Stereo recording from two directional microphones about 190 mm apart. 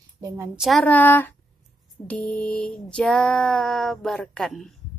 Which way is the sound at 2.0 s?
10° left (ahead or behind).